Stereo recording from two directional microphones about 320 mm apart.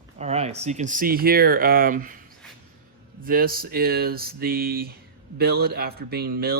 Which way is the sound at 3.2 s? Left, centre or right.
Right.